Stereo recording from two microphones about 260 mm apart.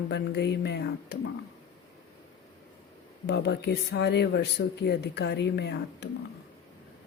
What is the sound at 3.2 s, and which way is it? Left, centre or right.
Speech, left.